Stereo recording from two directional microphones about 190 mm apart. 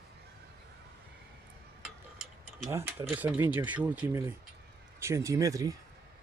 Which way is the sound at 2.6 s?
15° right (ahead or behind).